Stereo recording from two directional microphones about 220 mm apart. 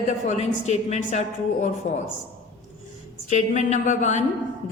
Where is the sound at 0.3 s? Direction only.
30° left (ahead or behind).